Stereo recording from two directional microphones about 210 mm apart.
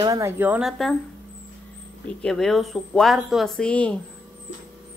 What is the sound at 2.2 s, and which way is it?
Speech, centre (ahead or behind).